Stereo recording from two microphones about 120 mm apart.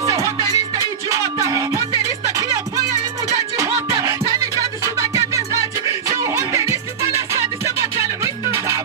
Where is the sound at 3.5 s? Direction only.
25° right (ahead or behind).